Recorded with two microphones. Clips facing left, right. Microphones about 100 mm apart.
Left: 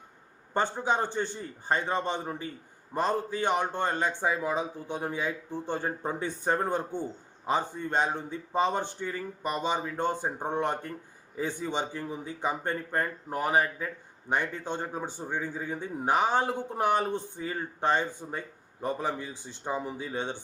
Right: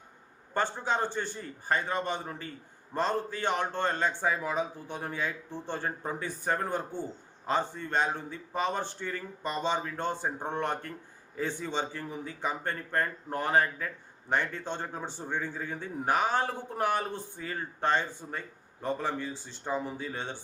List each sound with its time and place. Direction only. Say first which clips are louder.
0.5 s a man's voice: left 2 dB; 15° left (ahead or behind)